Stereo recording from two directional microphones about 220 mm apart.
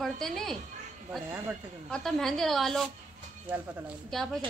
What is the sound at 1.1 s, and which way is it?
Speech, 10° right (ahead or behind).